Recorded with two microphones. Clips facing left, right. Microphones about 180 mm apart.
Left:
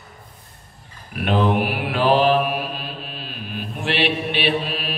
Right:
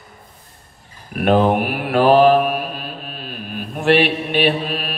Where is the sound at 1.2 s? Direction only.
45° right (ahead or behind).